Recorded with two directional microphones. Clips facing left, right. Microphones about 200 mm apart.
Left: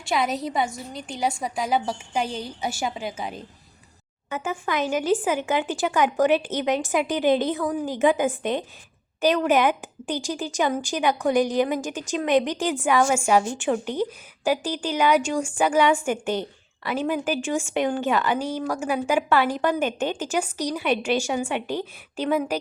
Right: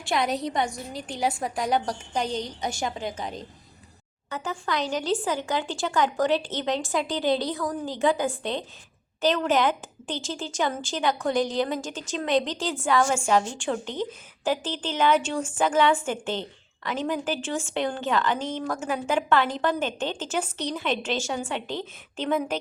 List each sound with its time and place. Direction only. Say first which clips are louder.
0.0 s a woman's voice: left 1 dB; centre (ahead or behind)
4.4 s a woman's voice: left 3 dB; 20° left (ahead or behind)